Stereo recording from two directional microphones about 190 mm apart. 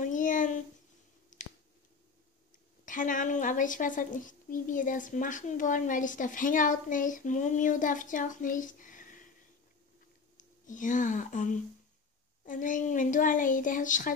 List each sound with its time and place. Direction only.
0.0 s a sound: 45° left (ahead or behind)
2.8 s a woman's voice: 45° left (ahead or behind)
10.3 s a woman's voice: 40° left (ahead or behind)